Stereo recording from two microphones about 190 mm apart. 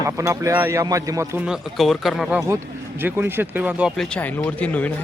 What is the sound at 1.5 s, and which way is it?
A man's voice, centre (ahead or behind).